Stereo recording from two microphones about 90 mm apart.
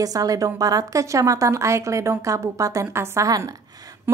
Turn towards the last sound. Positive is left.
turn(degrees=-40)  # may be behind; listen again after turning